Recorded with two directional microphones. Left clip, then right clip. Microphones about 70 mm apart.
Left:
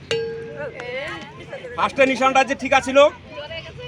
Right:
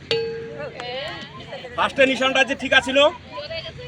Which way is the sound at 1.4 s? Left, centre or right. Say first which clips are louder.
Even; left.